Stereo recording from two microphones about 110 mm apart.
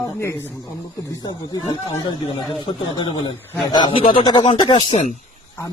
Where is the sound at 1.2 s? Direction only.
45° left (ahead or behind).